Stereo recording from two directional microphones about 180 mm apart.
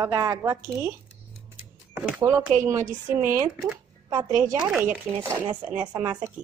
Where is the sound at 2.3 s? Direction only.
15° right (ahead or behind).